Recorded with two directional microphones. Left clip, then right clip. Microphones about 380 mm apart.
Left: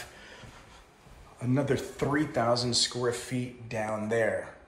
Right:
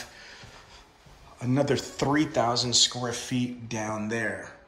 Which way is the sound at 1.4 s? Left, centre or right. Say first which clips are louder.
Right 3 dB; centre.